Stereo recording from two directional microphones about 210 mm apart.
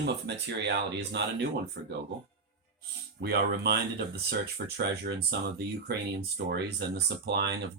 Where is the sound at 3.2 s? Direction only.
50° right (ahead or behind).